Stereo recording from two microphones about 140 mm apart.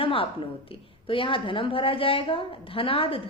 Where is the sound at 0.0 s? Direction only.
40° left (ahead or behind).